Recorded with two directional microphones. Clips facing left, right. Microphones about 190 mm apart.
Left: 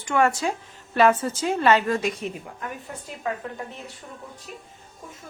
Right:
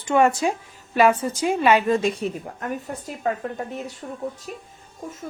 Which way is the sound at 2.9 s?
45° right (ahead or behind).